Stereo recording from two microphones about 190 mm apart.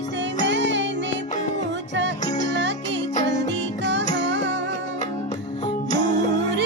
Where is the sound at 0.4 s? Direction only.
70° right (ahead or behind).